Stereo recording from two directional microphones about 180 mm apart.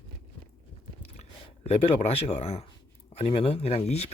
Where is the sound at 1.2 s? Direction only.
35° left (ahead or behind).